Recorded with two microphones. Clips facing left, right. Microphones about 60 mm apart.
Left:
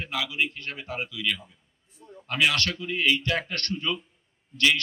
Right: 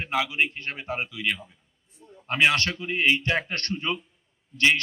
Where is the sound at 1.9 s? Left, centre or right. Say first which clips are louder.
Left 3 dB; left.